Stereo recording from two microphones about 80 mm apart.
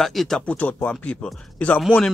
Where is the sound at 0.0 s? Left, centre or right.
Centre.